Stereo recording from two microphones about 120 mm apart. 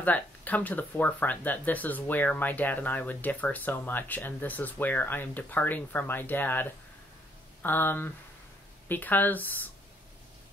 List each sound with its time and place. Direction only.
0.0 s speech: 15° left (ahead or behind)